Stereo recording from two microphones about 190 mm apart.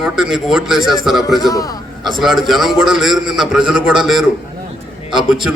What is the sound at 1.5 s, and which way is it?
Speech, 20° left (ahead or behind).